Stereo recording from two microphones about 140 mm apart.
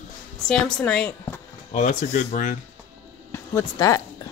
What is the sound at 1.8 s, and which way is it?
Speech, 65° left (ahead or behind).